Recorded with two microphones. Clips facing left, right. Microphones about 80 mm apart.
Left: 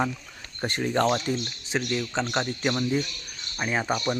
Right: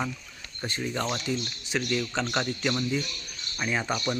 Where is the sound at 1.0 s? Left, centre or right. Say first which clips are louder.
Left 6 dB; left.